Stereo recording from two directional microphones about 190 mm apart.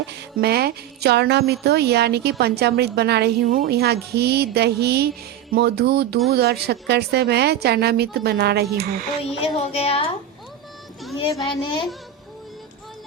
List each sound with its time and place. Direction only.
0.4 s a woman's voice: 55° right (ahead or behind)
3.4 s a woman's voice: 45° right (ahead or behind)
9.2 s a woman's voice: 30° left (ahead or behind)
11.2 s a child's voice: 25° left (ahead or behind)